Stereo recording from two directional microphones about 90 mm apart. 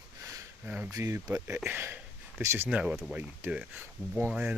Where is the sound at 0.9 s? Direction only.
30° right (ahead or behind).